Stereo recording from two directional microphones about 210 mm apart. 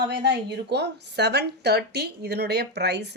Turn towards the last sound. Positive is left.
turn(degrees=-55)  # may be behind; listen again after turning